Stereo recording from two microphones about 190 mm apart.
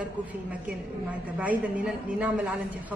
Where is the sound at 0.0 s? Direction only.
5° right (ahead or behind).